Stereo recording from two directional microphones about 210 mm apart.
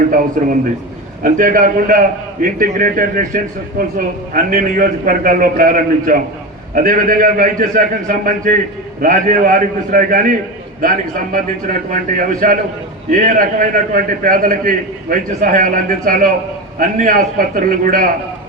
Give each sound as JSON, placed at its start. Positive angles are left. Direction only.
{"t": 0.4, "sound": "a man's voice", "side_deg": -40}